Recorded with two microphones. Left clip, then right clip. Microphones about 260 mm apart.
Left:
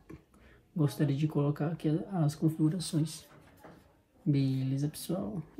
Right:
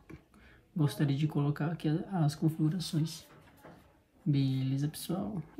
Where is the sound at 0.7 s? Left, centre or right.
Centre.